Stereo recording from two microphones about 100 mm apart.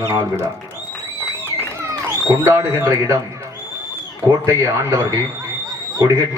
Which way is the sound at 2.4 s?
25° right (ahead or behind).